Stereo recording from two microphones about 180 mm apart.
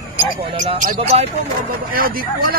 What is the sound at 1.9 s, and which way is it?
Speech, 55° right (ahead or behind).